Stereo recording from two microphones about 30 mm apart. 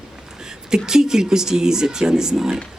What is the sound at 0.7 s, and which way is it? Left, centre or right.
Speech, right.